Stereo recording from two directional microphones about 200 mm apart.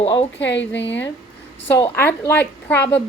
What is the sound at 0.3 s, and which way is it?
Speech, 65° left (ahead or behind).